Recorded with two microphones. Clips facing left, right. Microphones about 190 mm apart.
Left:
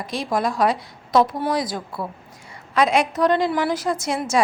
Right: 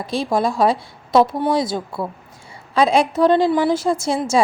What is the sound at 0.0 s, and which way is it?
A woman's voice, 30° right (ahead or behind).